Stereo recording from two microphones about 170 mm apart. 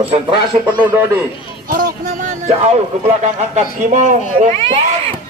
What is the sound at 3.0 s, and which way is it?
Speech, 35° right (ahead or behind).